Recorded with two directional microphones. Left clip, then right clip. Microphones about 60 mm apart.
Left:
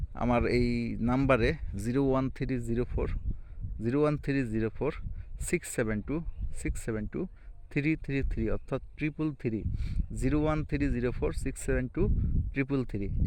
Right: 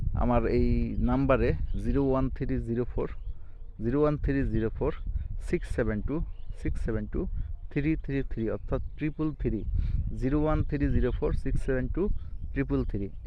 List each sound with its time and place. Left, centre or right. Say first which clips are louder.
0.1 s speech: right 1 dB; left
2.3 s a man's voice: right 1 dB; left
6.9 s a man's voice: right 1 dB; left